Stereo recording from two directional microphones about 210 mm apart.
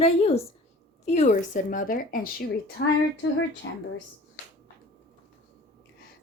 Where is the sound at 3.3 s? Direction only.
60° left (ahead or behind).